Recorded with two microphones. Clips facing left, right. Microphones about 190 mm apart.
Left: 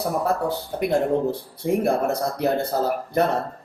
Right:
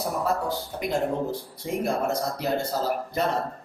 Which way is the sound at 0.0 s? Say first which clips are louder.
Left 4 dB; 60° left (ahead or behind).